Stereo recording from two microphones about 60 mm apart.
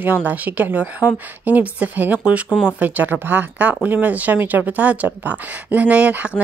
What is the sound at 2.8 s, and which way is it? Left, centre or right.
Speech, right.